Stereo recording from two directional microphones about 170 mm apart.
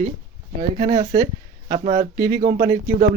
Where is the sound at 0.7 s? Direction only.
25° right (ahead or behind).